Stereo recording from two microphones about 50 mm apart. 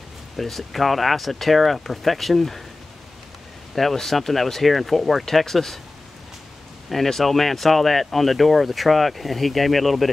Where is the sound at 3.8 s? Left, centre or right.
Centre.